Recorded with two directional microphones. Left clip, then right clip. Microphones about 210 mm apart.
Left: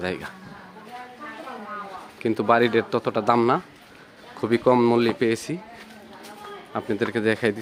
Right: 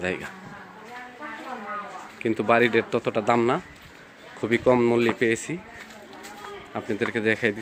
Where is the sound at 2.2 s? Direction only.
10° left (ahead or behind).